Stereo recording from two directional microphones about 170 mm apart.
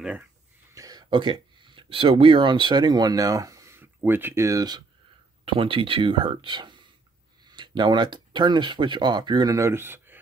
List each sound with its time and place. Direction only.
0.7 s speech: 20° right (ahead or behind)